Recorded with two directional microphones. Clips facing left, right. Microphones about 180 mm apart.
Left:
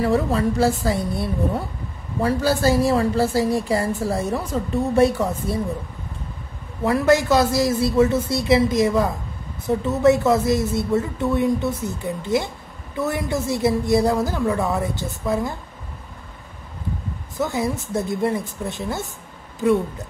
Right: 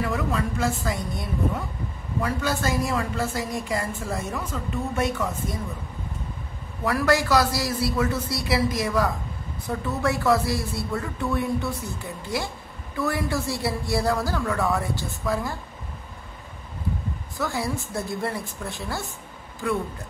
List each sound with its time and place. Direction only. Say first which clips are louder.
0.0 s a woman's voice: left 7 dB; 35° left (ahead or behind)
6.8 s speech: left 5 dB; 25° left (ahead or behind)
17.4 s speech: left 5 dB; 20° left (ahead or behind)